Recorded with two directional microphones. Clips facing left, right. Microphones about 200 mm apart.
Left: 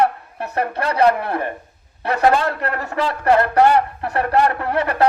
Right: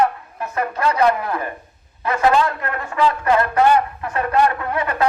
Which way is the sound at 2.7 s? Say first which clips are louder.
Left 2 dB; 40° left (ahead or behind).